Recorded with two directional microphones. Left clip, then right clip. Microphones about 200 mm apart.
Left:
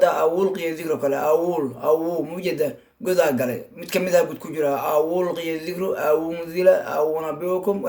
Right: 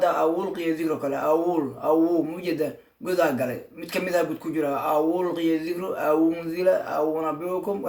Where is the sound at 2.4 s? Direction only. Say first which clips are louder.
Left 4 dB; 40° left (ahead or behind).